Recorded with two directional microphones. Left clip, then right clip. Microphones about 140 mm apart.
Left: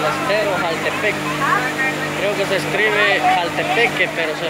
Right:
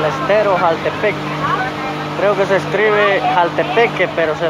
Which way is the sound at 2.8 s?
15° right (ahead or behind).